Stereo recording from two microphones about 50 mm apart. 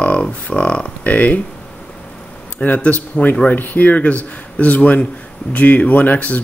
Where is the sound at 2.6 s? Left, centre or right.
Left.